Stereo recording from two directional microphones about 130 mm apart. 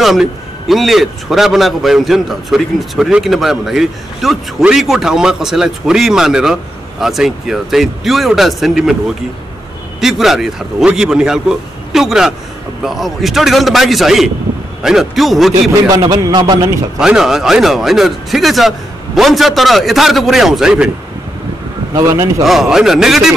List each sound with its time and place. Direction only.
0.0 s a man's voice: centre (ahead or behind)
9.9 s a man's voice: centre (ahead or behind)
15.9 s a man's voice: 30° right (ahead or behind)
17.0 s a man's voice: 5° right (ahead or behind)
21.9 s speech: 25° right (ahead or behind)
22.4 s a man's voice: centre (ahead or behind)